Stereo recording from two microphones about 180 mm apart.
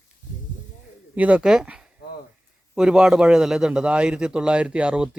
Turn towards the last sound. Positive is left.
turn(degrees=-5)  # may be behind; listen again after turning